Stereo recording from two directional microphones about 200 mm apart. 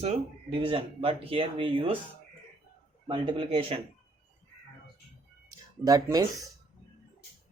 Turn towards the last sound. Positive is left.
turn(degrees=-20)  # may be behind; listen again after turning